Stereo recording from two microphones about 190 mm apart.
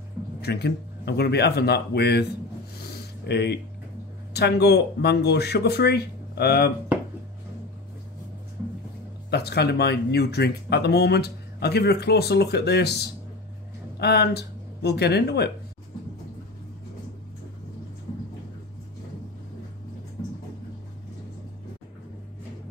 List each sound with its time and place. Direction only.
0.4 s speech: 60° left (ahead or behind)
2.9 s a sound: 60° left (ahead or behind)
4.3 s speech: 60° left (ahead or behind)
9.3 s speech: 60° left (ahead or behind)